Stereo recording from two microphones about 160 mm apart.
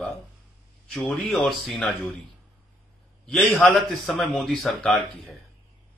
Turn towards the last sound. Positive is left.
turn(degrees=0)  # may be behind; listen again after turning